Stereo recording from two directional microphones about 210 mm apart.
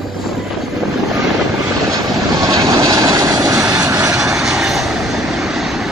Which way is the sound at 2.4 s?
20° right (ahead or behind).